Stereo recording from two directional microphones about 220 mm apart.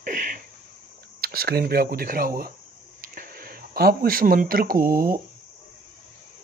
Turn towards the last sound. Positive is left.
turn(degrees=-40)  # may be behind; listen again after turning